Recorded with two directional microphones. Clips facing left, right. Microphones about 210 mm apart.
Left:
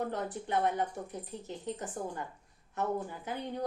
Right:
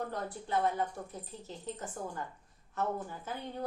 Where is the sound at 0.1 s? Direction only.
20° left (ahead or behind).